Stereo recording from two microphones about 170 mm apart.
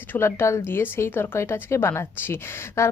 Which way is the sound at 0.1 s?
15° left (ahead or behind).